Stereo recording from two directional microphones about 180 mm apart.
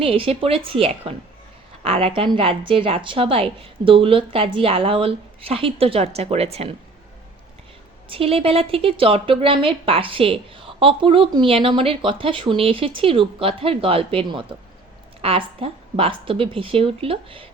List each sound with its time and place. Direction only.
0.0 s a woman's voice: 30° right (ahead or behind)
8.1 s a woman's voice: 30° right (ahead or behind)